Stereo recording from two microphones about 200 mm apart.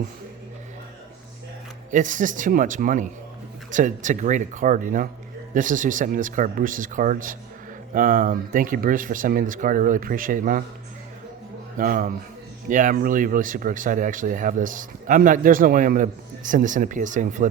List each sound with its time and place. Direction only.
1.9 s speech: 40° right (ahead or behind)
11.8 s speech: 45° right (ahead or behind)